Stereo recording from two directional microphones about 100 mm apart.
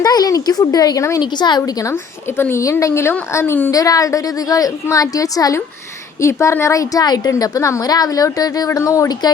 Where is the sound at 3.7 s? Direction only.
35° left (ahead or behind).